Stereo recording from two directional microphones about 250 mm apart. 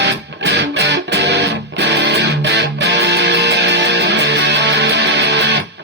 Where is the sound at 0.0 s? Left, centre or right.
Right.